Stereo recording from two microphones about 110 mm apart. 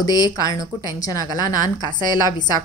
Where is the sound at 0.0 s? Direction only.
35° left (ahead or behind).